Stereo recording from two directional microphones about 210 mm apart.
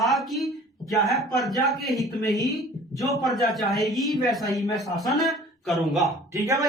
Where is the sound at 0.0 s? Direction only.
Centre (ahead or behind).